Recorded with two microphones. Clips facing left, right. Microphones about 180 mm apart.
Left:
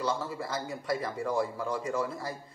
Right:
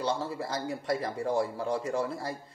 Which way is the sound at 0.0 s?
30° right (ahead or behind).